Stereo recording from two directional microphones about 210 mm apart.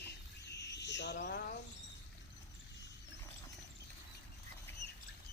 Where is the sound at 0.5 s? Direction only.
55° left (ahead or behind).